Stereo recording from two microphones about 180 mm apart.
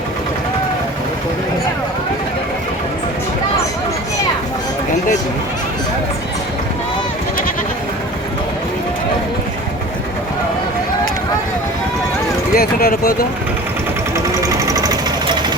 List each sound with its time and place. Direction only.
12.5 s speech: 60° left (ahead or behind)
14.7 s sewing machine: 20° right (ahead or behind)